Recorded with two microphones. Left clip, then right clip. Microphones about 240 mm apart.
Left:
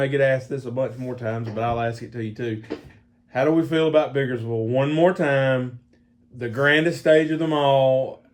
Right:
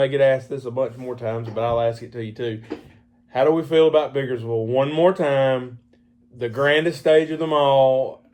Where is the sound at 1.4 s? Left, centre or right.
Left.